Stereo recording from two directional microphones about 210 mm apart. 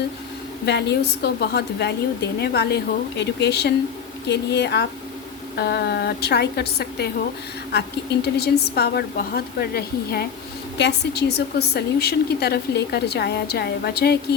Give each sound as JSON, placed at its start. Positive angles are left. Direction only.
{"t": 0.6, "sound": "a woman's voice", "side_deg": 55}